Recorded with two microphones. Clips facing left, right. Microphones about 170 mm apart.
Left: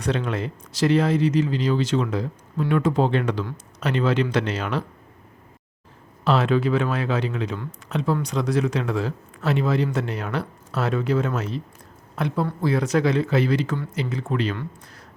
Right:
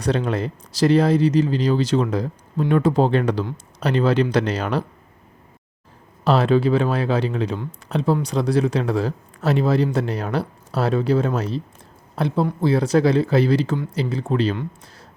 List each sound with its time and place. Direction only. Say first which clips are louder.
0.0 s speech: right 3 dB; 35° right (ahead or behind)
6.2 s speech: right 3 dB; 35° right (ahead or behind)